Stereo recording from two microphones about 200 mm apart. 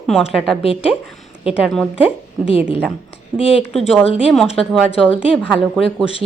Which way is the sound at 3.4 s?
30° left (ahead or behind).